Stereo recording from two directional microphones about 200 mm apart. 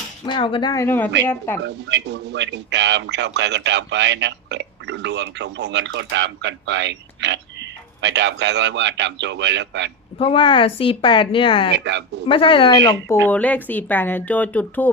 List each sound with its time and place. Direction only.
0.3 s a woman's voice: 25° left (ahead or behind)
1.6 s a man's voice: 60° right (ahead or behind)
10.2 s a woman's voice: 25° left (ahead or behind)
11.9 s a man's voice: 60° right (ahead or behind)
12.3 s a woman's voice: 25° left (ahead or behind)
13.2 s speech: 10° left (ahead or behind)